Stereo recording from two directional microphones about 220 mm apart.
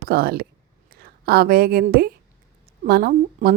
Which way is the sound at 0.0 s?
45° right (ahead or behind).